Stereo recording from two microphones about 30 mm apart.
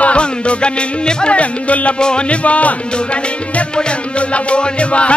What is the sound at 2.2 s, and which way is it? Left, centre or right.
Music, left.